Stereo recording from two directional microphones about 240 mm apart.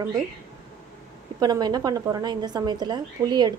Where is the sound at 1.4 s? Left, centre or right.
Centre.